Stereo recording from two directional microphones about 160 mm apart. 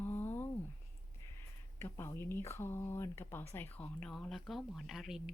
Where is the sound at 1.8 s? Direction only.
15° left (ahead or behind); by 5.3 s centre (ahead or behind).